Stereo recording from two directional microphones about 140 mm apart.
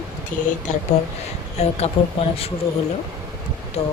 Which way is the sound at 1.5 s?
50° left (ahead or behind).